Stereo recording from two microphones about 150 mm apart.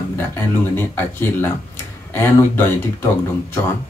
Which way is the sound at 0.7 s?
15° left (ahead or behind).